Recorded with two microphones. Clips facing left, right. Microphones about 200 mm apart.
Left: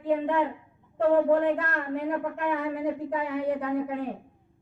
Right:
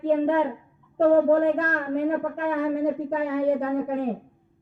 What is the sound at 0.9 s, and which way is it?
A child's voice, 40° right (ahead or behind).